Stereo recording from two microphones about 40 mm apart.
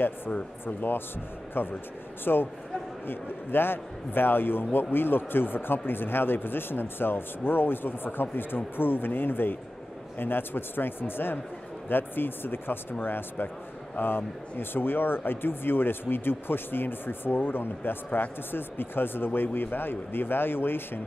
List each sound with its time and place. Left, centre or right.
0.3 s speech: left
1.5 s a man's voice: left
2.3 s speech: left
3.1 s a man's voice: left